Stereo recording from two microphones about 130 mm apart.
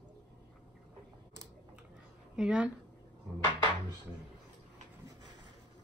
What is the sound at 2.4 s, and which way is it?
Speech, 5° right (ahead or behind).